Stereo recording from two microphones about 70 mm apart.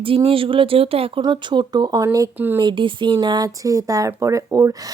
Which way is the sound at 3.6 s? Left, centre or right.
Right.